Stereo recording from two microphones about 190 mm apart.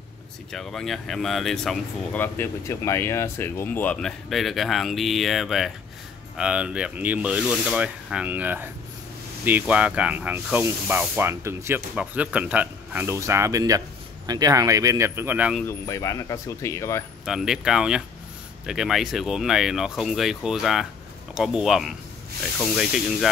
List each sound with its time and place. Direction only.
0.5 s speech: centre (ahead or behind)
15.6 s speech: 15° left (ahead or behind)
17.2 s speech: centre (ahead or behind)